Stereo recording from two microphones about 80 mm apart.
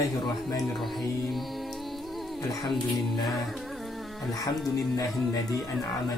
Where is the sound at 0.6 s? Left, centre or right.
Centre.